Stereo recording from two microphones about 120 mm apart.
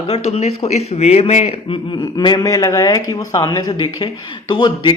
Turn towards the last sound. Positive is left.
turn(degrees=40)  # may be behind; listen again after turning